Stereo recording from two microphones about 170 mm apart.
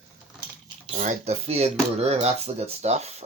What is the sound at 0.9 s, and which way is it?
Speech, 40° right (ahead or behind).